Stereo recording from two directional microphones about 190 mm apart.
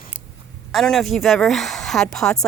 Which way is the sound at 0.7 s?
Centre (ahead or behind).